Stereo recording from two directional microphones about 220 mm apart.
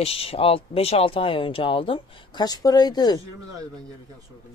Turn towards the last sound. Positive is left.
turn(degrees=20)  # may be behind; listen again after turning